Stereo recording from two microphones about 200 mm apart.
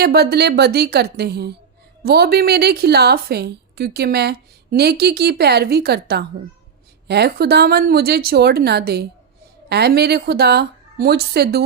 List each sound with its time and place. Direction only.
0.0 s a woman's voice: 50° right (ahead or behind)